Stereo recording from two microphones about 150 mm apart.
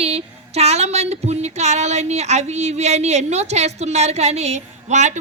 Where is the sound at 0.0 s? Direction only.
45° right (ahead or behind).